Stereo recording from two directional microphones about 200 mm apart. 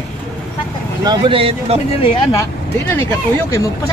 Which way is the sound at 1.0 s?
25° right (ahead or behind).